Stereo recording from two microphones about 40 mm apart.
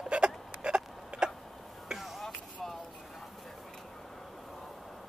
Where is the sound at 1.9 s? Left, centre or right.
Centre.